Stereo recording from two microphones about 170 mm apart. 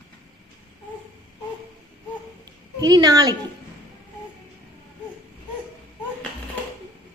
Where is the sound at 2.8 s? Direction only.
25° right (ahead or behind).